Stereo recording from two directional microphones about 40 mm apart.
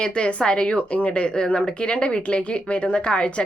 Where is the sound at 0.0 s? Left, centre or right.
Left.